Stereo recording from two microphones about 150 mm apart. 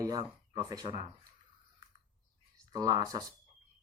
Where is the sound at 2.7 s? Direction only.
25° right (ahead or behind).